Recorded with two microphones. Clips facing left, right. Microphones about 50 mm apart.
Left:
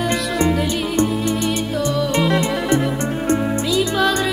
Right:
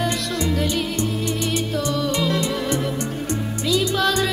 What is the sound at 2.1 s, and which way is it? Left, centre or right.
Music, left.